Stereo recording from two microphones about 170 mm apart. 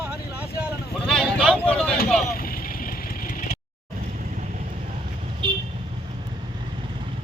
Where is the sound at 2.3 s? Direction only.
60° left (ahead or behind).